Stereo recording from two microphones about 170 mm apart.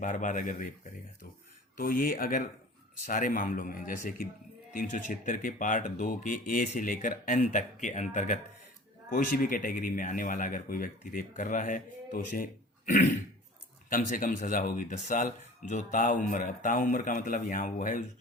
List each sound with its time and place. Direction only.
0.0 s speech: 50° left (ahead or behind)
1.7 s speech: 55° left (ahead or behind)